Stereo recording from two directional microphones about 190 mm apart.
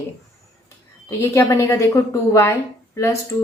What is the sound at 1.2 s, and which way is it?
A woman's voice, 15° left (ahead or behind).